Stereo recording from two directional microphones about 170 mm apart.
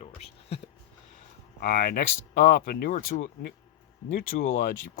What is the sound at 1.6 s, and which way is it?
Speech, 60° left (ahead or behind).